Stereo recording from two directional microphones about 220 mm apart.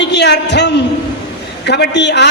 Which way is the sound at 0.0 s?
50° left (ahead or behind).